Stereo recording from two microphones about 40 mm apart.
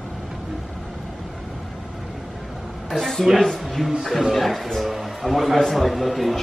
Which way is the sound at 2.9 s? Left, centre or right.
Centre.